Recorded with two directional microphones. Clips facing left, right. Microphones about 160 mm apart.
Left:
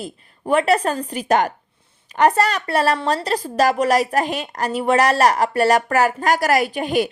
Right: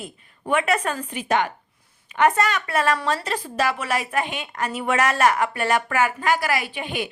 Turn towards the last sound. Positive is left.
turn(degrees=40)  # may be behind; listen again after turning